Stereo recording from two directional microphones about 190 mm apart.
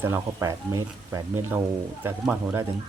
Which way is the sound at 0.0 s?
10° right (ahead or behind).